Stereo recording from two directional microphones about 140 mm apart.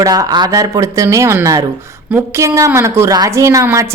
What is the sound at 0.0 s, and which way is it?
A woman's voice, 25° right (ahead or behind).